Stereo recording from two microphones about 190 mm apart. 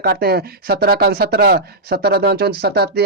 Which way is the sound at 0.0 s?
55° right (ahead or behind).